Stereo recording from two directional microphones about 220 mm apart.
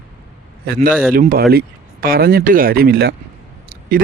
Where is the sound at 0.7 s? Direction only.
45° right (ahead or behind).